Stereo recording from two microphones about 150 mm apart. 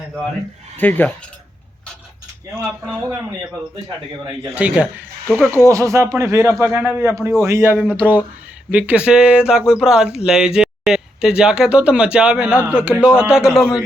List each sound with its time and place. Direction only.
0.8 s speech: 10° left (ahead or behind)
4.5 s speech: 10° right (ahead or behind)